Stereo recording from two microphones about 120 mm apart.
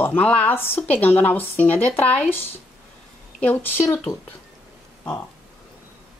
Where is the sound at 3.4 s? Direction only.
15° left (ahead or behind).